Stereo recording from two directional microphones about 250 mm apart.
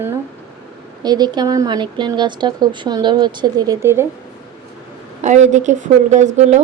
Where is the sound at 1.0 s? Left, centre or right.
Centre.